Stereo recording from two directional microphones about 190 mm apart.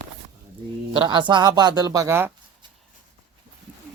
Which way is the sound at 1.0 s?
25° right (ahead or behind).